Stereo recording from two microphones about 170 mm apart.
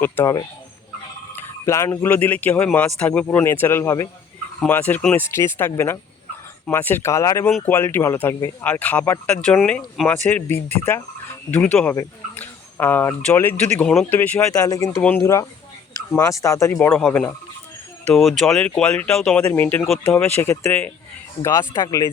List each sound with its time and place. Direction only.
0.0 s speech: 10° left (ahead or behind)
1.4 s speech: 15° left (ahead or behind)
14.5 s speech: 20° left (ahead or behind)
18.1 s speech: centre (ahead or behind)
19.8 s speech: centre (ahead or behind)
20.3 s speech: 10° left (ahead or behind)